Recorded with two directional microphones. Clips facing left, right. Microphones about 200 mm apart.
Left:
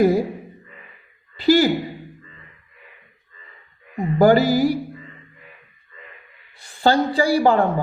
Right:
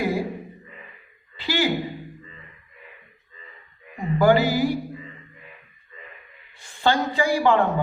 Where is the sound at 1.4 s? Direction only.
40° left (ahead or behind).